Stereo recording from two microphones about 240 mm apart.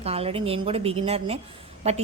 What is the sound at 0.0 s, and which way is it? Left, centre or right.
A woman's voice, right.